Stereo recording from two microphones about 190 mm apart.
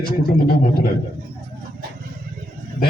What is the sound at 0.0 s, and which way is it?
Speech, 50° left (ahead or behind).